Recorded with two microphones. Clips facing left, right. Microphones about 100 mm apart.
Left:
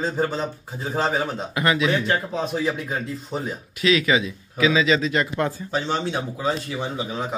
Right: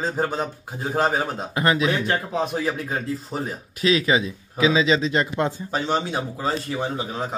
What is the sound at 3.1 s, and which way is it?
Speech, centre (ahead or behind).